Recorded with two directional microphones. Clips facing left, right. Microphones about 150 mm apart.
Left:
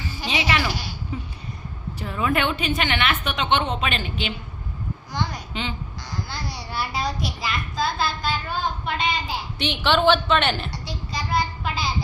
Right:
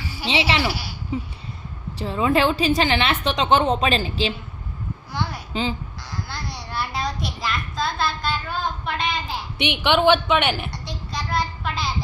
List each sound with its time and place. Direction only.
0.3 s a woman's voice: 25° right (ahead or behind)
5.5 s a woman's voice: 35° right (ahead or behind)
6.2 s a child's voice: centre (ahead or behind)
9.6 s a woman's voice: 15° right (ahead or behind)
10.7 s a sound: centre (ahead or behind)